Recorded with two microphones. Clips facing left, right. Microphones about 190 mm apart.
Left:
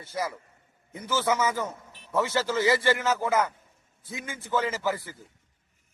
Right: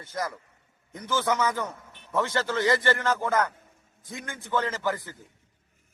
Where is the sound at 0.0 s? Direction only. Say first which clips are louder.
Left 1 dB; 10° left (ahead or behind).